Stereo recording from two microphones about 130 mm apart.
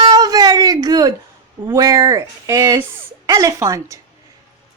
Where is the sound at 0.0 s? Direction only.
30° right (ahead or behind).